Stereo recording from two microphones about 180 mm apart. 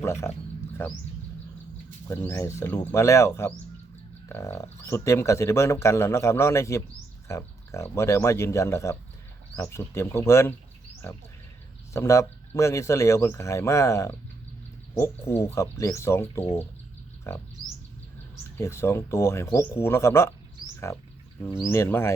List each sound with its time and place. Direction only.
0.0 s speech: 15° left (ahead or behind)
2.0 s speech: 15° left (ahead or behind)
11.9 s speech: 15° left (ahead or behind)
16.4 s speech: 35° left (ahead or behind)
17.3 s speech: 15° left (ahead or behind)
18.5 s speech: 15° left (ahead or behind)
21.4 s speech: 15° left (ahead or behind)